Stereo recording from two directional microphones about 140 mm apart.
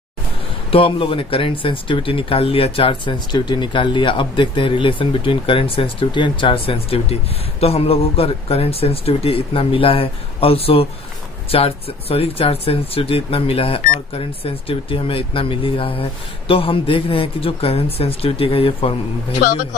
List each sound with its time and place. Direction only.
0.7 s speech: 40° left (ahead or behind)